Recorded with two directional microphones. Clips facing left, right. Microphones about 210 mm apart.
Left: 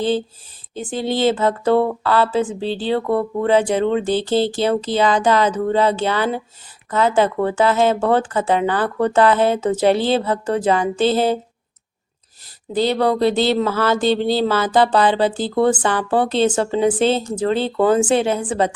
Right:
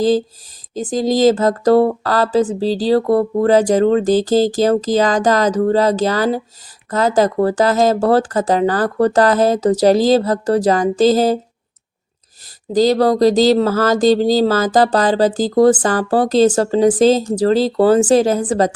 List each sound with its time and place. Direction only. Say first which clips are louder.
0.7 s speech: right 5 dB; 40° right (ahead or behind)
12.7 s speech: right 5 dB; 40° right (ahead or behind)